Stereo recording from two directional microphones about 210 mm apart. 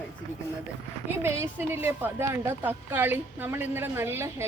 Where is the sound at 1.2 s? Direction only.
10° right (ahead or behind).